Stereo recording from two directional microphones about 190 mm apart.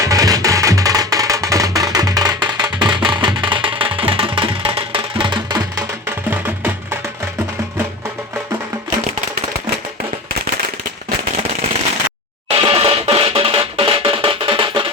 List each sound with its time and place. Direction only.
0.0 s music: 20° right (ahead or behind)
6.1 s music: 10° right (ahead or behind)
12.5 s music: 30° right (ahead or behind)